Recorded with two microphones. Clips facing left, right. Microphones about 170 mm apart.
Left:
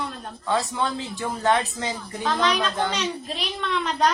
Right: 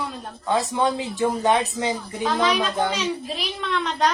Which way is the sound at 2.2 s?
5° right (ahead or behind).